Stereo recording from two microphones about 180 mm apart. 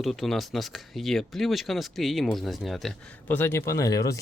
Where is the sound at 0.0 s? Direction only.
Centre (ahead or behind).